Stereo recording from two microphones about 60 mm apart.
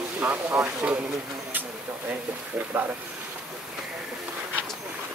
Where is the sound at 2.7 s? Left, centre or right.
Right.